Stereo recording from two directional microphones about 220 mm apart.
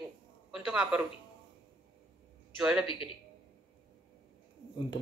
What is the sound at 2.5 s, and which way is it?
Speech, centre (ahead or behind).